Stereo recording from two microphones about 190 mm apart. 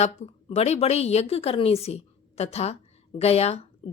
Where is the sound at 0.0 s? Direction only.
30° left (ahead or behind).